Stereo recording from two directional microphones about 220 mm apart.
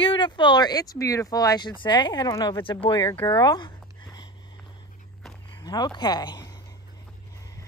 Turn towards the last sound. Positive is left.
turn(degrees=15)  # may be behind; listen again after turning